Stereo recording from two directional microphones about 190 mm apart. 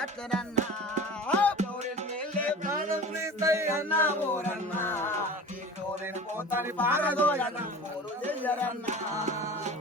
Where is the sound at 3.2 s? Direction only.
15° right (ahead or behind).